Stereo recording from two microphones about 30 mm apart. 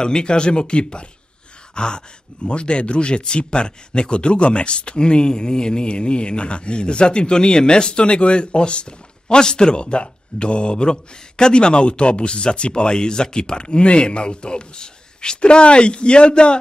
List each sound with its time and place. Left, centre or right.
0.0 s speech: left